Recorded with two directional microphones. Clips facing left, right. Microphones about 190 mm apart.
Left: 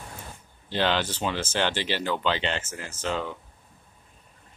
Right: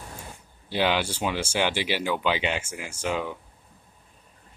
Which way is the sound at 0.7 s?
10° right (ahead or behind).